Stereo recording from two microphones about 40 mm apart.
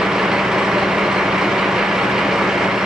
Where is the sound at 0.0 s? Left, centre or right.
Centre.